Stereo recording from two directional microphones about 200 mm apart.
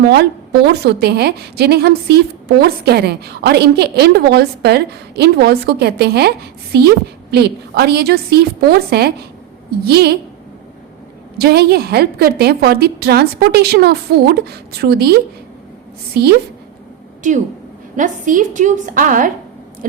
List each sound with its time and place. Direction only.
0.0 s a woman's voice: 55° right (ahead or behind)
11.3 s a woman's voice: 55° right (ahead or behind)
17.2 s a woman's voice: 40° right (ahead or behind)
19.8 s a sound: 45° right (ahead or behind)